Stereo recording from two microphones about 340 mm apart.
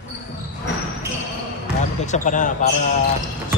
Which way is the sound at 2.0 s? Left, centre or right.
Left.